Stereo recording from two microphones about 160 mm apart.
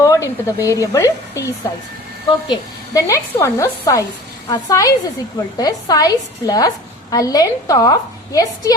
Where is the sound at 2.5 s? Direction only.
20° left (ahead or behind).